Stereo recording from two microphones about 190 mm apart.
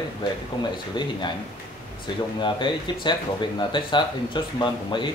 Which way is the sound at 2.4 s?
25° left (ahead or behind).